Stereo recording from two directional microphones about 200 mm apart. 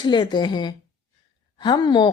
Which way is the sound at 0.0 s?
20° left (ahead or behind).